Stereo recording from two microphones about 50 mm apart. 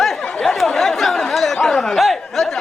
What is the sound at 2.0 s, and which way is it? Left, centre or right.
Speech, centre.